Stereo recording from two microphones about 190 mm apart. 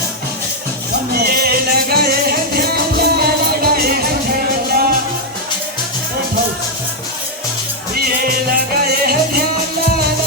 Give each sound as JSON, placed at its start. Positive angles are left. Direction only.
{"t": 1.1, "sound": "music", "side_deg": -55}
{"t": 8.4, "sound": "music", "side_deg": -55}